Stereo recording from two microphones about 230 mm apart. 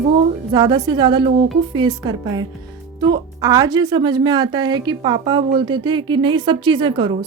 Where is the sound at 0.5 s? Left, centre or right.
Centre.